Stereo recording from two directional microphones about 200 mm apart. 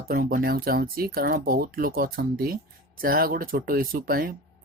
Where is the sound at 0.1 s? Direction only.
45° right (ahead or behind).